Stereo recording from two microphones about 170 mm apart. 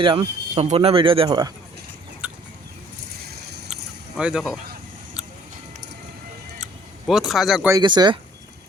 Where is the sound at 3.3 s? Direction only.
70° right (ahead or behind).